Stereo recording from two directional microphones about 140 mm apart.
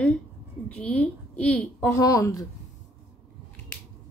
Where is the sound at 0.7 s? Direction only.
10° left (ahead or behind).